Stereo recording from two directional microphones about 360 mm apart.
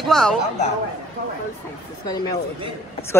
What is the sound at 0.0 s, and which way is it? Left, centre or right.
Speech, centre.